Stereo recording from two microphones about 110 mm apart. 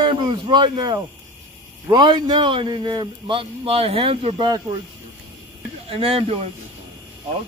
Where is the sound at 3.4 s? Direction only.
60° right (ahead or behind).